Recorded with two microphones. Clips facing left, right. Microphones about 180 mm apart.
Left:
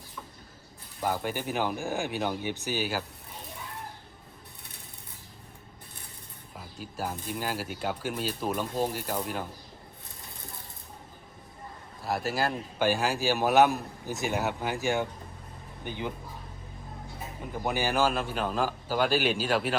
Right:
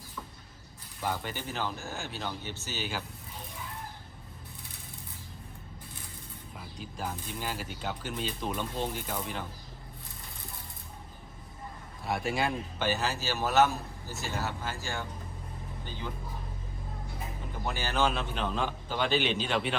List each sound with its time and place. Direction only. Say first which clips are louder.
1.0 s a man's voice: left 4 dB; 10° left (ahead or behind)
6.9 s a man's voice: left 4 dB; 5° left (ahead or behind)
12.0 s a man's voice: left 1 dB; centre (ahead or behind); by 16.1 s 15° left (ahead or behind)
17.6 s a man's voice: left 3 dB; 15° left (ahead or behind)